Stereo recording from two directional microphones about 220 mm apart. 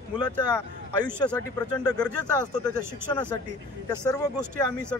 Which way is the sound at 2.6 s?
20° left (ahead or behind).